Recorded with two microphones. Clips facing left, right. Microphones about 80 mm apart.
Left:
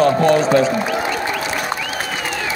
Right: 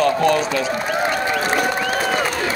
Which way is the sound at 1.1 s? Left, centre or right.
Right.